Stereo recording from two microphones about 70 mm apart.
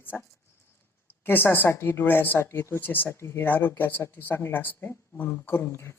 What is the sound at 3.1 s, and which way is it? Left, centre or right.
Speech, left.